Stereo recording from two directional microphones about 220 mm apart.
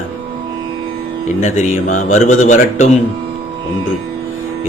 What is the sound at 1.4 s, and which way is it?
A man's voice, 35° left (ahead or behind).